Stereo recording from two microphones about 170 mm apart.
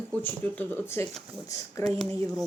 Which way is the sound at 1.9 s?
Centre (ahead or behind).